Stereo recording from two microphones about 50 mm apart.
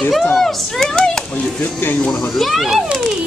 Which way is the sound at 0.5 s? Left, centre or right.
Centre.